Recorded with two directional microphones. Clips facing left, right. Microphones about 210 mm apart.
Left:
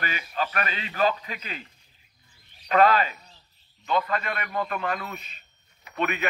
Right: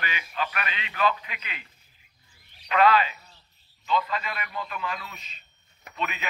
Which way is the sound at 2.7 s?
45° left (ahead or behind).